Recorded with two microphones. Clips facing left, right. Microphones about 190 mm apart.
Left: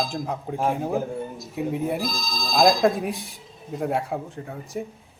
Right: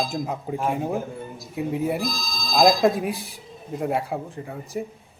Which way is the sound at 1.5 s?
Centre (ahead or behind).